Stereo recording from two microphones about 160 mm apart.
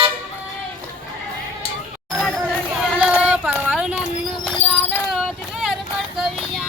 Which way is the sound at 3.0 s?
5° right (ahead or behind).